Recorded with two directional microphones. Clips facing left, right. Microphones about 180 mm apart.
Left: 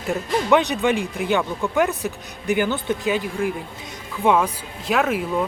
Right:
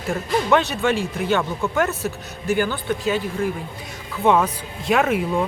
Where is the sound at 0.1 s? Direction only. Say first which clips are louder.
Left 1 dB; 15° left (ahead or behind).